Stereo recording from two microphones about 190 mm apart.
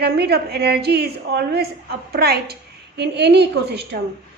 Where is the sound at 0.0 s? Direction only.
60° right (ahead or behind).